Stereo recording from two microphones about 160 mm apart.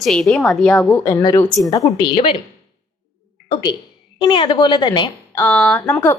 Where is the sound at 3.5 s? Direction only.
25° left (ahead or behind).